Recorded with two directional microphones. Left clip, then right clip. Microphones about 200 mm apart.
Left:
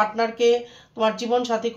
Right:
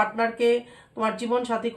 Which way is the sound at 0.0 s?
35° left (ahead or behind).